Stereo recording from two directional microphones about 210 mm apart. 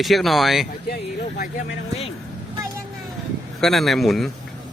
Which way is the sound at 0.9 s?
40° left (ahead or behind).